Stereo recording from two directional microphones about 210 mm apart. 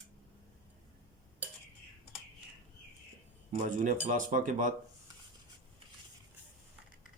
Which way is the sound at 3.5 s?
35° right (ahead or behind).